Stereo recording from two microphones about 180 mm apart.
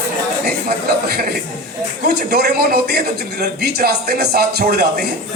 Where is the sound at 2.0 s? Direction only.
60° right (ahead or behind).